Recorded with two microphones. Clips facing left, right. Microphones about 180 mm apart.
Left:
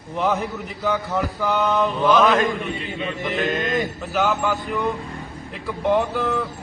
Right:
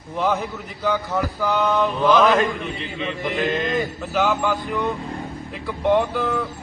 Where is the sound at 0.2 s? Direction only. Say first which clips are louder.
Even; centre (ahead or behind).